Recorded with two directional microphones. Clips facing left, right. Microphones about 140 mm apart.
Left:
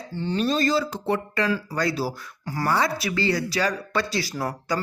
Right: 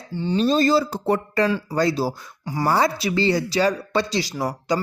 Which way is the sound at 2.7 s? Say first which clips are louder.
Right 4 dB; 30° right (ahead or behind).